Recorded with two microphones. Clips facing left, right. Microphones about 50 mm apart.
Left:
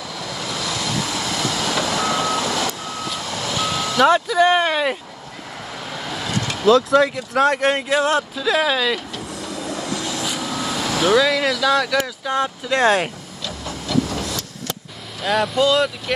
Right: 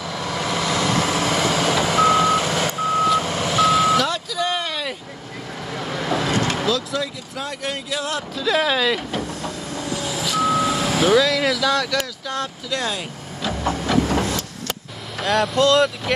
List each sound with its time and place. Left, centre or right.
0.2 s vehicle: right
3.5 s reversing beeps: centre
4.0 s speech: left
6.1 s vehicle: right
6.7 s speech: left
8.4 s speech: centre
9.1 s vehicle: right
10.4 s reversing beeps: centre
11.2 s speech: centre
12.6 s speech: left
13.5 s hiss: right
15.2 s speech: centre